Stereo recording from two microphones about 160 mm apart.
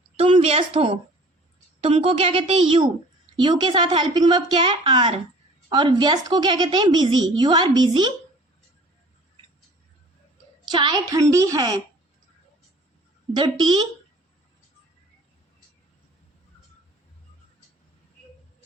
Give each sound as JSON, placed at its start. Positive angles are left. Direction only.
{"t": 0.2, "sound": "a woman's voice", "side_deg": -35}
{"t": 10.7, "sound": "a woman's voice", "side_deg": -30}
{"t": 13.3, "sound": "a woman's voice", "side_deg": -30}